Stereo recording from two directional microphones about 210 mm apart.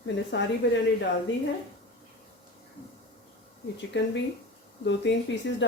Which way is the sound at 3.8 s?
55° left (ahead or behind).